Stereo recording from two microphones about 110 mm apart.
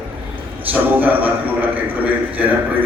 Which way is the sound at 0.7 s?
15° right (ahead or behind).